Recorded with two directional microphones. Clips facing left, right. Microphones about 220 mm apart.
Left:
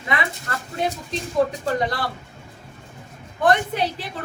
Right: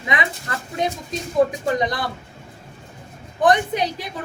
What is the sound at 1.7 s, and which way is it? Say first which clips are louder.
Speech: left 1 dB; 15° right (ahead or behind).